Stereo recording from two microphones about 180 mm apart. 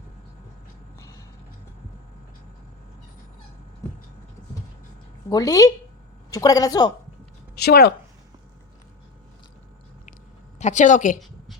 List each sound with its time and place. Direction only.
5.3 s a woman's voice: 20° left (ahead or behind)
7.5 s speech: 65° left (ahead or behind)
10.6 s a woman's voice: 40° left (ahead or behind)